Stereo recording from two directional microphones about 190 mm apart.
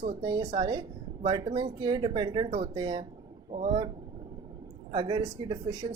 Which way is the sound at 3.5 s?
30° right (ahead or behind).